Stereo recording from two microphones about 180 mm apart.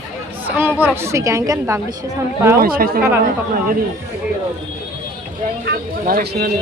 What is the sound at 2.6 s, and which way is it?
Speech, 55° right (ahead or behind).